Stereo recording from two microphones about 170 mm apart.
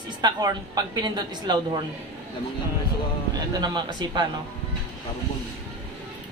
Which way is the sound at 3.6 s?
25° right (ahead or behind).